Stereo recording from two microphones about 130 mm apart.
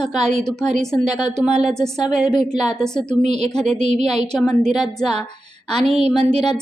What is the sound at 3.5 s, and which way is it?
Speech, 5° left (ahead or behind).